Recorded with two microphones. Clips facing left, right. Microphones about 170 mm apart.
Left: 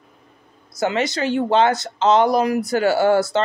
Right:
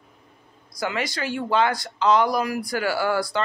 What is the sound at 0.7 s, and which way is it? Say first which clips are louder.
Speech: left 6 dB; 25° left (ahead or behind).